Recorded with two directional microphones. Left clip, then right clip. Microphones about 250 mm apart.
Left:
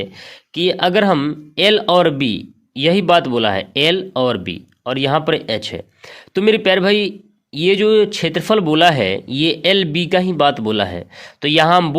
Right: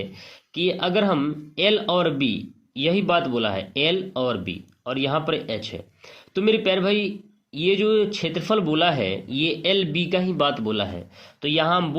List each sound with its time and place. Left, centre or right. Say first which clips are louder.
0.0 s speech: left 7 dB; left